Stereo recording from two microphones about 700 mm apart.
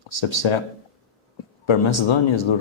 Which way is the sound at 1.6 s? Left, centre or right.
Left.